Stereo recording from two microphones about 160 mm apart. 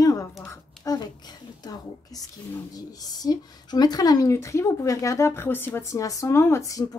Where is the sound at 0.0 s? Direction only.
20° left (ahead or behind).